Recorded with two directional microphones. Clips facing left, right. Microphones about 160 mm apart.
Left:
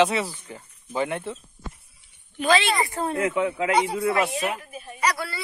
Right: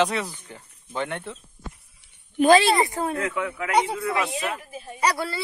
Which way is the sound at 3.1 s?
20° left (ahead or behind).